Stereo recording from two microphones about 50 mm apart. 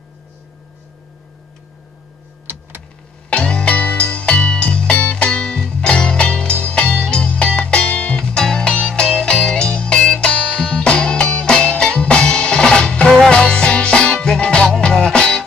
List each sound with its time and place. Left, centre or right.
3.3 s music: centre